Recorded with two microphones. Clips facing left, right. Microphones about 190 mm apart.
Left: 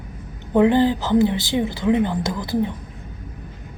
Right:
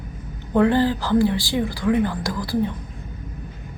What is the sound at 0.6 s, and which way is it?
A woman's voice, 20° left (ahead or behind).